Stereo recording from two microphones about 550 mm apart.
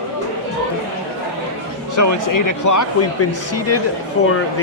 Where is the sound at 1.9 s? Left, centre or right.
Left.